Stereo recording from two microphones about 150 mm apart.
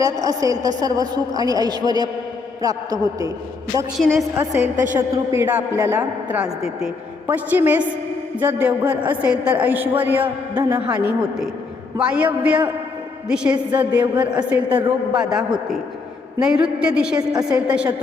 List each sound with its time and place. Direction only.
0.0 s a woman's voice: 25° right (ahead or behind)
4.4 s a woman's voice: 15° right (ahead or behind)